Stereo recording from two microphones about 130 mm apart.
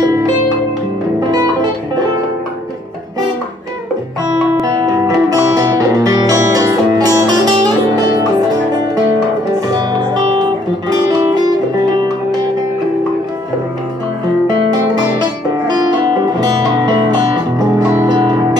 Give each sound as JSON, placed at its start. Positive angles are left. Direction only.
{"t": 1.3, "sound": "music", "side_deg": -30}
{"t": 4.6, "sound": "music", "side_deg": -30}
{"t": 15.6, "sound": "music", "side_deg": -35}